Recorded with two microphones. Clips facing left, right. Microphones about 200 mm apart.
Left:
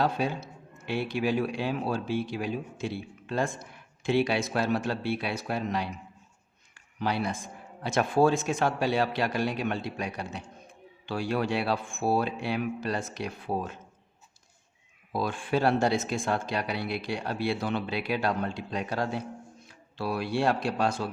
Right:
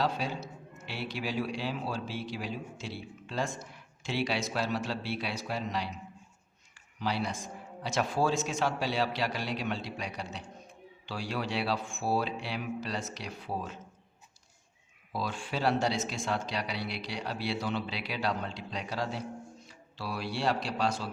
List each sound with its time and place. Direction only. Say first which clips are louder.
0.0 s a man's voice: left 4 dB; 55° left (ahead or behind)
15.1 s a man's voice: left 7 dB; 55° left (ahead or behind)